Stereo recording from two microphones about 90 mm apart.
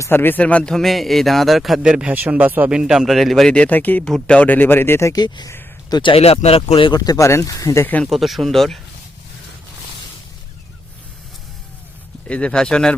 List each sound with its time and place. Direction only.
0.0 s speech: 25° left (ahead or behind)
5.1 s speech: 50° left (ahead or behind)
5.9 s speech: 70° left (ahead or behind); by 6.9 s 85° left
6.9 s speech: 45° left (ahead or behind)
7.3 s speech: 35° left (ahead or behind)
8.0 s speech: centre (ahead or behind)
12.3 s speech: 10° left (ahead or behind)